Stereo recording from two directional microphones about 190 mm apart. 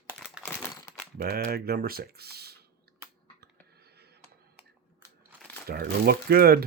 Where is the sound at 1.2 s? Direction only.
50° right (ahead or behind).